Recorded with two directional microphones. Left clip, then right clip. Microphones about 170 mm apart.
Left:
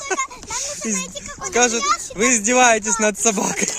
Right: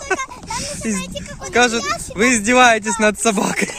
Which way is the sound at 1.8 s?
90° right.